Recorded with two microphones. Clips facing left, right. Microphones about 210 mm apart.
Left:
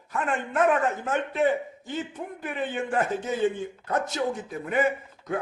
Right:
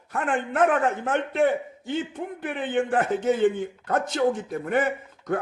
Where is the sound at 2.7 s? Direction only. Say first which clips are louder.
Right 5 dB; 55° right (ahead or behind).